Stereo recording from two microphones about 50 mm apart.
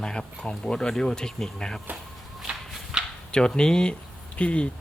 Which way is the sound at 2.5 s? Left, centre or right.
Centre.